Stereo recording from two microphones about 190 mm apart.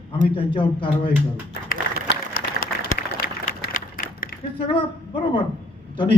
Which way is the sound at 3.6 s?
45° left (ahead or behind).